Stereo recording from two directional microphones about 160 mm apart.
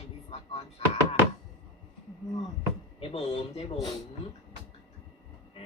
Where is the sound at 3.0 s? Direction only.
40° left (ahead or behind).